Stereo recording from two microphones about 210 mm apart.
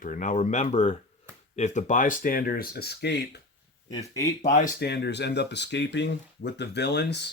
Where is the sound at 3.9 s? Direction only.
15° left (ahead or behind).